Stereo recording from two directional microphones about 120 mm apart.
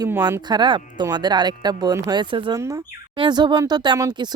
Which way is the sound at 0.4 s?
40° right (ahead or behind).